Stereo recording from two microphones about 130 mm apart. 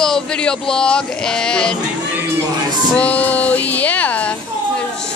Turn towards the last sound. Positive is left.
turn(degrees=10)  # may be behind; listen again after turning